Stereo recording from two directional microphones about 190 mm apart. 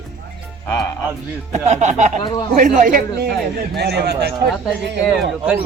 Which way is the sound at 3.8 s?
60° right (ahead or behind).